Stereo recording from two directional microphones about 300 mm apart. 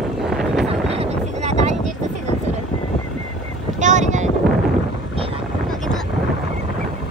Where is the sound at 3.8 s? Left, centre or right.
Right.